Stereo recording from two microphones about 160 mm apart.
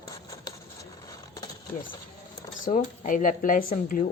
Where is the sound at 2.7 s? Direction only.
50° left (ahead or behind).